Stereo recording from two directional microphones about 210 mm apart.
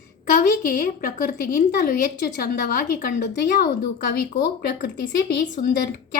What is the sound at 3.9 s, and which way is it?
A woman's voice, 40° left (ahead or behind).